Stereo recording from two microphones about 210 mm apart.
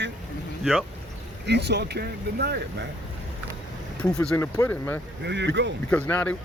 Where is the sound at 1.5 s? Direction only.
50° right (ahead or behind).